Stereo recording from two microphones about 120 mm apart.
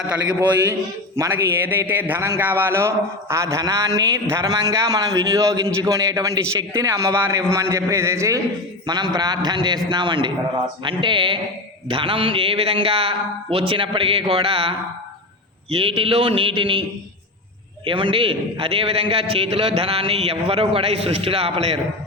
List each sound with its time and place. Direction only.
0.3 s a man's voice: 20° right (ahead or behind)
8.9 s a man's voice: 35° right (ahead or behind)
17.8 s a man's voice: 45° right (ahead or behind)